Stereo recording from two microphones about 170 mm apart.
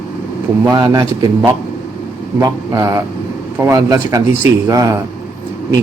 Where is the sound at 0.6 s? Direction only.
20° right (ahead or behind).